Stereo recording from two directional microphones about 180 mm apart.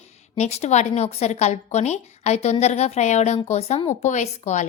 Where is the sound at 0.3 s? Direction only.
40° left (ahead or behind).